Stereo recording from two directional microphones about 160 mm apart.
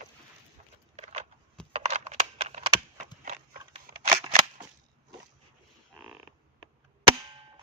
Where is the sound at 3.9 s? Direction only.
65° right (ahead or behind).